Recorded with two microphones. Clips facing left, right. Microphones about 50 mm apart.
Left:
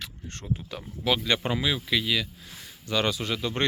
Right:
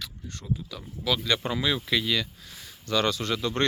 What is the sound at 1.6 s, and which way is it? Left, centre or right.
Speech, centre.